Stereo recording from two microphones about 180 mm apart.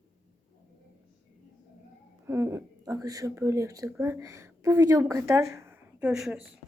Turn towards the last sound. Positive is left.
turn(degrees=0)  # may be behind; listen again after turning